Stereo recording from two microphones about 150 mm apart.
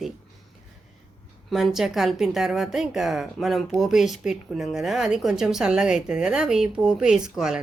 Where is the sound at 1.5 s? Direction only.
Centre (ahead or behind).